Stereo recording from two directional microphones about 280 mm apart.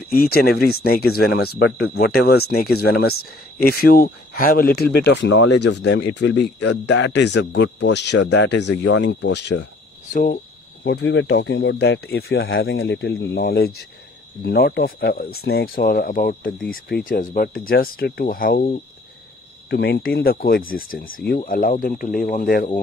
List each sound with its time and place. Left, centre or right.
0.1 s speech: left
10.1 s cricket: left
10.9 s speech: left